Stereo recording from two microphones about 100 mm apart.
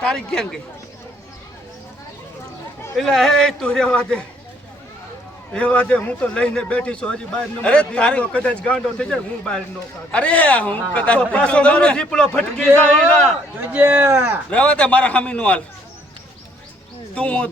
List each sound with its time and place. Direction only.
0.0 s a man's voice: 5° left (ahead or behind)
3.0 s speech: 5° left (ahead or behind)
5.5 s a man's voice: 10° left (ahead or behind)
13.6 s speech: 15° right (ahead or behind)
14.5 s a man's voice: 10° left (ahead or behind)
17.2 s a man's voice: 10° left (ahead or behind)